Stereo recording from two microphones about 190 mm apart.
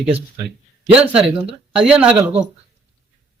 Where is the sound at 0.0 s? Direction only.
5° right (ahead or behind).